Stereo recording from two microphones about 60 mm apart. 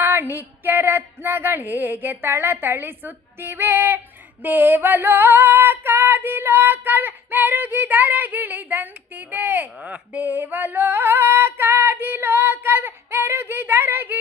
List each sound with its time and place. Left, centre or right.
0.0 s female singing: right
9.8 s female singing: centre; by 14.2 s right